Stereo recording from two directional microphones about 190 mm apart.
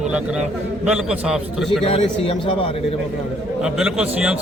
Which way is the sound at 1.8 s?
30° left (ahead or behind).